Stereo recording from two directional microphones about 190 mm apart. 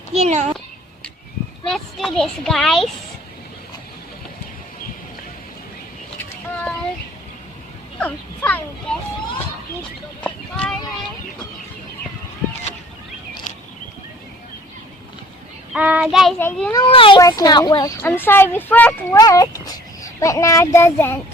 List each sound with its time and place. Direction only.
0.1 s a child's voice: 35° right (ahead or behind)
1.7 s speech: centre (ahead or behind)
7.9 s a sound: 10° left (ahead or behind)
10.2 s a sound: 5° left (ahead or behind)
15.7 s speech: 5° right (ahead or behind)
16.4 s speech: 10° left (ahead or behind)
16.7 s speech: 25° left (ahead or behind); by 19.2 s 10° left (ahead or behind)
19.2 s a child's voice: 20° left (ahead or behind)